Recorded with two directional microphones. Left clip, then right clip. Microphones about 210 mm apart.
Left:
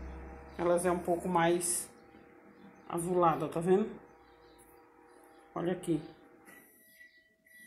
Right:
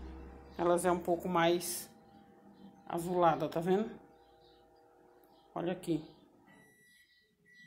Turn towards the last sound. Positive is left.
turn(degrees=-5)  # may be behind; listen again after turning